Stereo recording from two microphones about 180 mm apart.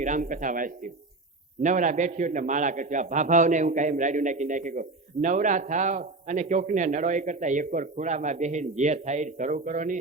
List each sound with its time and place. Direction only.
0.0 s a man's voice: 45° right (ahead or behind)